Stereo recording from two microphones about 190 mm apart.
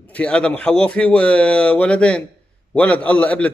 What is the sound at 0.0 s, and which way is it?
A man's voice, 5° left (ahead or behind).